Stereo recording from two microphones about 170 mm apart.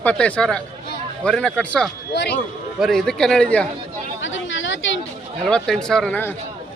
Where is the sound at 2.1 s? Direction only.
90° left.